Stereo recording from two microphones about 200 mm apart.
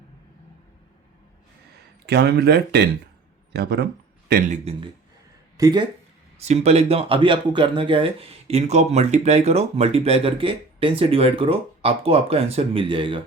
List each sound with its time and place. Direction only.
2.0 s speech: 55° right (ahead or behind)
5.5 s speech: 20° right (ahead or behind)
6.4 s speech: 30° right (ahead or behind)